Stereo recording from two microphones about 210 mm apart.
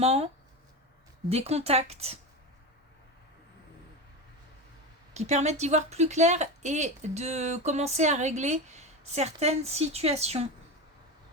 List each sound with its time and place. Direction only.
0.0 s speech: 30° right (ahead or behind)
1.3 s speech: 30° right (ahead or behind)
5.1 s speech: 35° right (ahead or behind)